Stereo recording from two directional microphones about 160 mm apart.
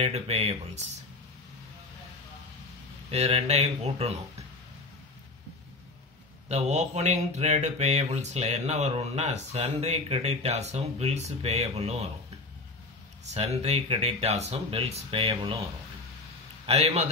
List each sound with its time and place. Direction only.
0.0 s speech: 40° right (ahead or behind)
3.1 s speech: 40° right (ahead or behind)
6.5 s a sound: 45° right (ahead or behind)
13.3 s speech: 40° right (ahead or behind)
16.6 s speech: 40° right (ahead or behind)